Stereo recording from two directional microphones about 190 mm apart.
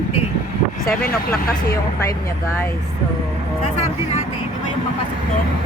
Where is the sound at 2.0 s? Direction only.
15° left (ahead or behind).